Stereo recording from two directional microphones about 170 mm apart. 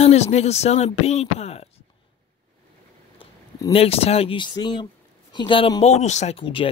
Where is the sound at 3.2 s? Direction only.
35° left (ahead or behind).